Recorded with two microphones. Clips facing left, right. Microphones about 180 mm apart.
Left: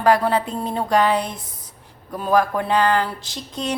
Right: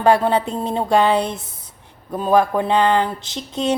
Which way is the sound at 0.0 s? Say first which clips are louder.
Right 2 dB; 25° right (ahead or behind).